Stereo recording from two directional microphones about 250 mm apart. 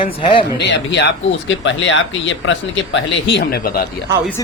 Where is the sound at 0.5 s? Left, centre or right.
Left.